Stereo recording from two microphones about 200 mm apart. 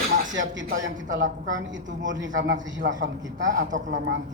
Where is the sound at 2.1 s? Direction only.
70° right (ahead or behind).